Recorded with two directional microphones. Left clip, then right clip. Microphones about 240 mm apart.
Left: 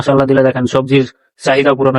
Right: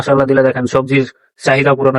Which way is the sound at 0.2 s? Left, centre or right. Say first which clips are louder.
Even; centre.